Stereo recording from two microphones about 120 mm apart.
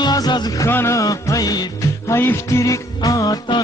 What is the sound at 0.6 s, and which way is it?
Music, 20° left (ahead or behind).